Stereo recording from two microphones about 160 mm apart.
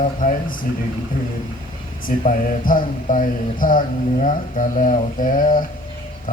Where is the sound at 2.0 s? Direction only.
60° left (ahead or behind).